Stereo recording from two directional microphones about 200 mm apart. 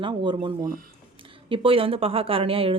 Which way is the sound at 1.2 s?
25° right (ahead or behind).